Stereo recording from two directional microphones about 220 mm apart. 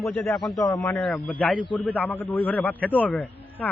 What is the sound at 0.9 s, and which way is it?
A man's voice, 5° left (ahead or behind).